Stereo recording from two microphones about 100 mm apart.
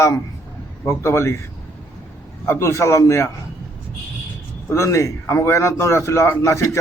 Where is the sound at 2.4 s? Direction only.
25° left (ahead or behind).